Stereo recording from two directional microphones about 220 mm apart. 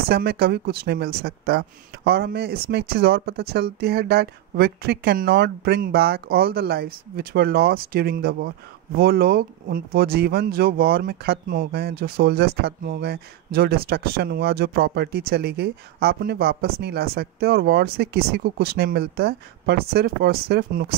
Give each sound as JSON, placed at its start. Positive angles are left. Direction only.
{"t": 0.1, "sound": "speech", "side_deg": -45}